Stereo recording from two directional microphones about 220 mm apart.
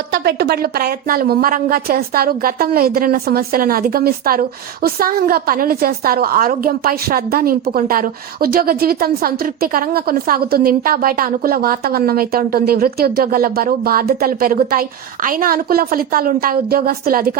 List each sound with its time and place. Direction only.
0.1 s a woman's voice: 45° right (ahead or behind)